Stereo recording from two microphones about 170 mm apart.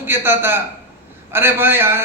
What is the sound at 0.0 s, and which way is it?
A man's voice, 15° right (ahead or behind).